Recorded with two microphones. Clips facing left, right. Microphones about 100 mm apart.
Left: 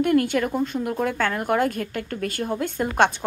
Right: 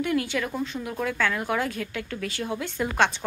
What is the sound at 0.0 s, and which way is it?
A woman's voice, 50° left (ahead or behind).